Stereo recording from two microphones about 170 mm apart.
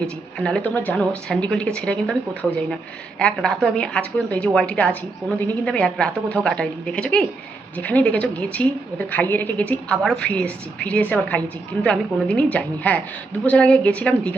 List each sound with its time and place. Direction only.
0.0 s a woman's voice: 5° left (ahead or behind)